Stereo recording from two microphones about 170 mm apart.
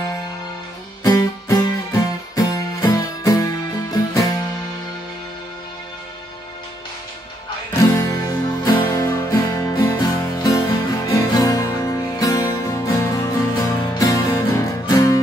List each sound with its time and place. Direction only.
1.0 s music: 20° left (ahead or behind)
7.7 s music: 20° left (ahead or behind)